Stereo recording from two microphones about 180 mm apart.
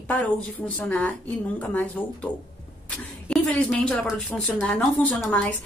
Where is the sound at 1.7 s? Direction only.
5° left (ahead or behind).